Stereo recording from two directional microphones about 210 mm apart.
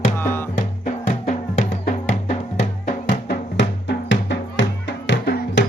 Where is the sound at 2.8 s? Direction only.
50° left (ahead or behind).